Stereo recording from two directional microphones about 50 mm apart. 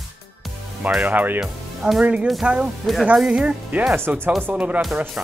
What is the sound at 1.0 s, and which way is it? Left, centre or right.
Speech, right.